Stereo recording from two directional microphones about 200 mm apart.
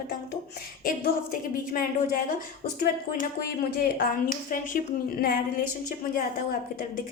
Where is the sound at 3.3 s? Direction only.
50° left (ahead or behind).